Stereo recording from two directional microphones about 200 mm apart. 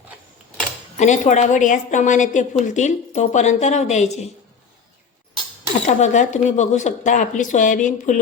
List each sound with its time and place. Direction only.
0.9 s a woman's voice: 35° left (ahead or behind)
5.8 s a woman's voice: 35° left (ahead or behind)